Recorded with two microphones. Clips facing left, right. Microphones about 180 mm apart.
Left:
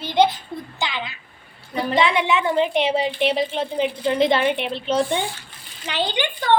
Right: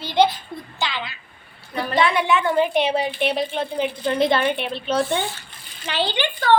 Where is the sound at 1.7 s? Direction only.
20° left (ahead or behind).